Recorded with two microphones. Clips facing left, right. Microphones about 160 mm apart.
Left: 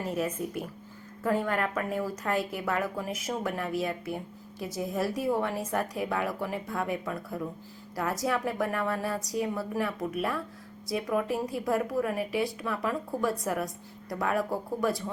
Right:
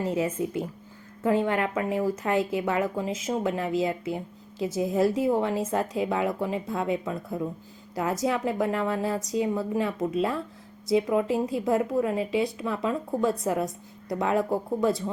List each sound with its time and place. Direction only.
0.2 s speech: 25° right (ahead or behind)